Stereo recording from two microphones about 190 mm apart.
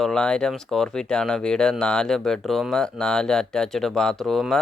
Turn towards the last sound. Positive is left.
turn(degrees=0)  # may be behind; listen again after turning